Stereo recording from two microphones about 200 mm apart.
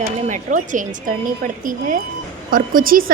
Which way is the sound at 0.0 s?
40° right (ahead or behind).